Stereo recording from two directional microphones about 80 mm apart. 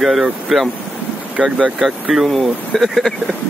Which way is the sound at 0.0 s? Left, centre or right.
Centre.